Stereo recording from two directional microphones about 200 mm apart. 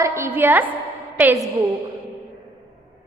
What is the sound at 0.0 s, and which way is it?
A woman's voice, 15° right (ahead or behind).